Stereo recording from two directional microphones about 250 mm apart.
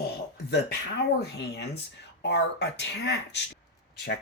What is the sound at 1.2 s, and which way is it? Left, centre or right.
Speech, left.